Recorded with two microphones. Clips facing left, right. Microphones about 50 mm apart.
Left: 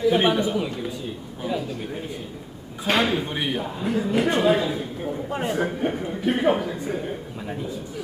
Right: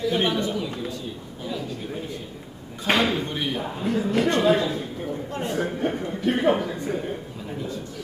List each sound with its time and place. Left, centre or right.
0.0 s speech: centre
1.4 s a sound: centre
2.9 s a man's voice: centre